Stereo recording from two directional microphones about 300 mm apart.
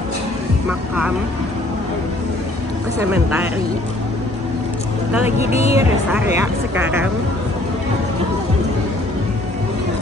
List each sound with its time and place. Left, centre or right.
0.7 s speech: centre
3.0 s speech: centre
5.4 s speech: left
5.8 s speech: centre